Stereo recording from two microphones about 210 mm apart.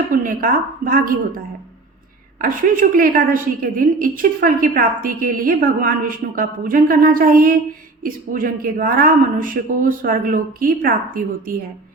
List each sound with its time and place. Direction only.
0.1 s a woman's voice: 40° right (ahead or behind)
2.4 s a woman's voice: 40° right (ahead or behind)